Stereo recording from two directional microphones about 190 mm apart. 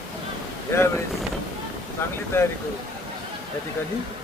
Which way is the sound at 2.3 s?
10° left (ahead or behind).